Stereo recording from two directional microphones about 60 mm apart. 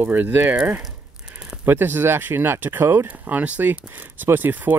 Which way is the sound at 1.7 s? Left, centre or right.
Right.